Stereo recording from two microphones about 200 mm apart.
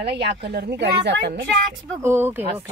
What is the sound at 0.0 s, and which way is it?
Speech, 55° right (ahead or behind).